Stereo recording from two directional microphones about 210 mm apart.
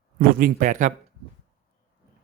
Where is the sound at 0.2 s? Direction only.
45° right (ahead or behind).